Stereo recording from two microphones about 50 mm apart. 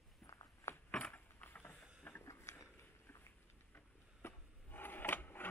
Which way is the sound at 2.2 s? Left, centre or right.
Left.